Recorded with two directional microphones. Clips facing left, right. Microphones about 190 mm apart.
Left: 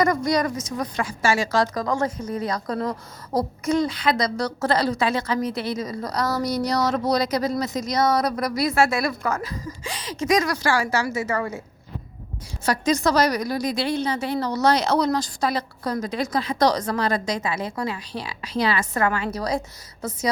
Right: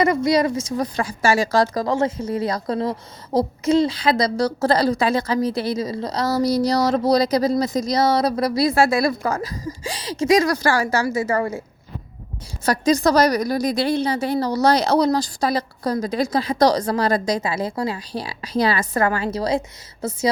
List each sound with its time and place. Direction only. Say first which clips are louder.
0.0 s a woman's voice: right 3 dB; 25° right (ahead or behind)
12.6 s a woman's voice: right 4 dB; 35° right (ahead or behind)